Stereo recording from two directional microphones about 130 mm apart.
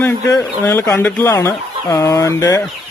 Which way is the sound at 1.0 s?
15° left (ahead or behind).